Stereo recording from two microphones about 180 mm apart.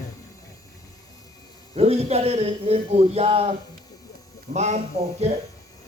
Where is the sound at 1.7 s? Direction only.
35° right (ahead or behind).